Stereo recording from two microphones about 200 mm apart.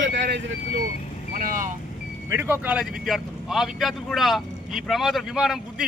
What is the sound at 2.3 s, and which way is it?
Speech, 10° right (ahead or behind).